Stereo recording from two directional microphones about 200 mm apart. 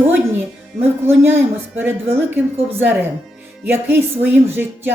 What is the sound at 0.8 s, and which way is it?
Speech, 10° right (ahead or behind).